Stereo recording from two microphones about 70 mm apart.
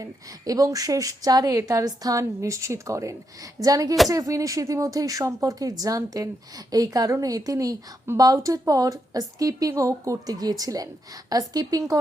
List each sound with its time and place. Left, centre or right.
0.0 s a woman's voice: right